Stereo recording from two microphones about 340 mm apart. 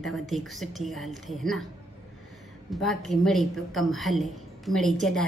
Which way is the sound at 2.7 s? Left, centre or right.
Centre.